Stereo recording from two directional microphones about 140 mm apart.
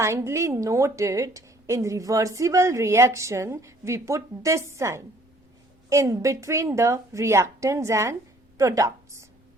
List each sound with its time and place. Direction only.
0.0 s a woman's voice: 20° right (ahead or behind)